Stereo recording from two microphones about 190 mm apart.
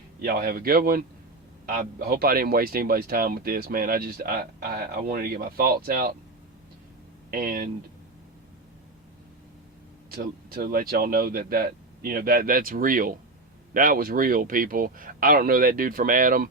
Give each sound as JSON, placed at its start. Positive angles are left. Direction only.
{"t": 0.2, "sound": "speech", "side_deg": -50}
{"t": 7.3, "sound": "speech", "side_deg": -50}
{"t": 10.1, "sound": "speech", "side_deg": -50}